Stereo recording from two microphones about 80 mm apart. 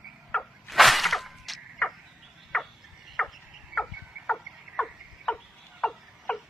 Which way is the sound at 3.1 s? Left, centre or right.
Centre.